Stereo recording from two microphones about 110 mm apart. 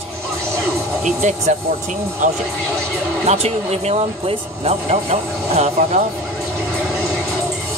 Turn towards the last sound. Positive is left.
turn(degrees=-75)  # may be behind; listen again after turning